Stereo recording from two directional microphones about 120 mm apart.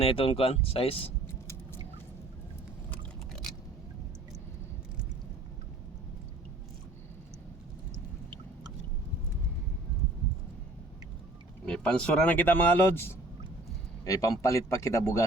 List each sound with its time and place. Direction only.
0.0 s speech: 55° left (ahead or behind)
2.9 s biting: 5° left (ahead or behind)
11.6 s speech: 10° left (ahead or behind)
14.0 s speech: 30° left (ahead or behind)